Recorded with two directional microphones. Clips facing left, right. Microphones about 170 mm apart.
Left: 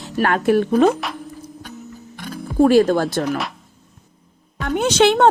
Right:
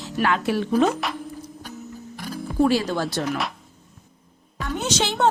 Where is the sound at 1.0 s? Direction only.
Centre (ahead or behind).